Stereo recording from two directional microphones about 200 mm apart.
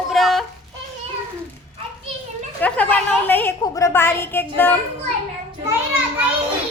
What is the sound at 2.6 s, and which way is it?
A woman's voice, 5° left (ahead or behind).